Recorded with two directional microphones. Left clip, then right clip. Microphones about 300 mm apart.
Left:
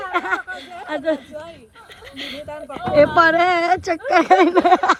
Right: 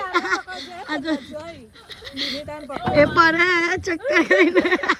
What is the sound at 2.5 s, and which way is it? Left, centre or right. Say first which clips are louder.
Speech: even; right.